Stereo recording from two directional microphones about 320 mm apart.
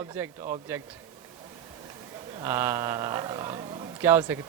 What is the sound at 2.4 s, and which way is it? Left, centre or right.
A man's voice, centre.